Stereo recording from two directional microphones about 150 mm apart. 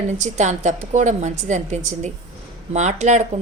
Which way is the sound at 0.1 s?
50° right (ahead or behind).